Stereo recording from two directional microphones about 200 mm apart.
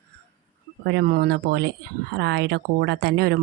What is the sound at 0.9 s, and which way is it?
Speech, 50° right (ahead or behind).